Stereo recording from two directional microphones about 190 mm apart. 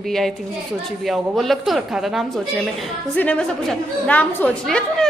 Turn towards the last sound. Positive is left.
turn(degrees=5)  # may be behind; listen again after turning